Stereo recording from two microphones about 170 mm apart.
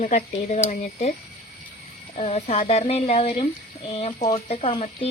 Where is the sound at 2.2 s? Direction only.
40° left (ahead or behind).